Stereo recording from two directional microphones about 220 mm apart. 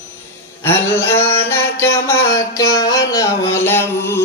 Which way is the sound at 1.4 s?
10° left (ahead or behind).